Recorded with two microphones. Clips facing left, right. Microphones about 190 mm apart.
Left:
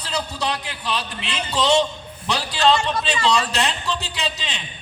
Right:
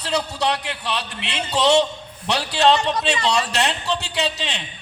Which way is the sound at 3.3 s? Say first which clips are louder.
Even; 65° right (ahead or behind).